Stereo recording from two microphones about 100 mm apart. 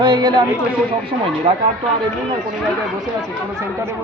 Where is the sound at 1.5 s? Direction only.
75° right (ahead or behind).